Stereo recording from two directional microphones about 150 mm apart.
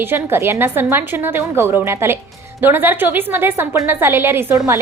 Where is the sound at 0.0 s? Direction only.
15° right (ahead or behind).